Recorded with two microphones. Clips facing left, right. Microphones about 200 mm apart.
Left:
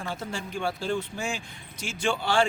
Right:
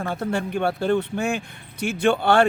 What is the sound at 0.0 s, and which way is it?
Speech, 60° right (ahead or behind).